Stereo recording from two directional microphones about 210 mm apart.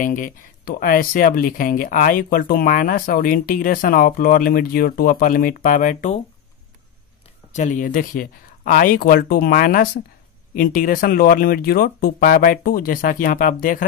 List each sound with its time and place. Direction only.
0.0 s speech: 40° left (ahead or behind)
7.5 s speech: 35° left (ahead or behind)